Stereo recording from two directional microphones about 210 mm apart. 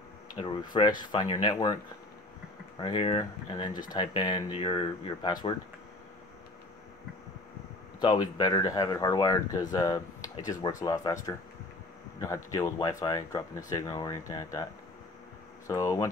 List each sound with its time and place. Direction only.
0.3 s speech: 20° left (ahead or behind)
2.8 s speech: 20° left (ahead or behind)
8.0 s speech: 20° left (ahead or behind)